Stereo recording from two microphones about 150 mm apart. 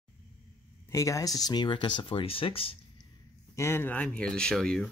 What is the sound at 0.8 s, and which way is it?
Speech, 20° left (ahead or behind).